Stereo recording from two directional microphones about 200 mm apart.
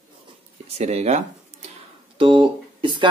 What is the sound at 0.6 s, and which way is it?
Speech, 30° right (ahead or behind).